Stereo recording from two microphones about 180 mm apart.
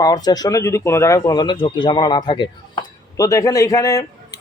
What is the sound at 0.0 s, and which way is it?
Speech, 20° left (ahead or behind).